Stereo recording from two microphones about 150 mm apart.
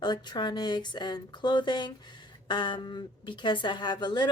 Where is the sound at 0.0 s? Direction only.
30° left (ahead or behind).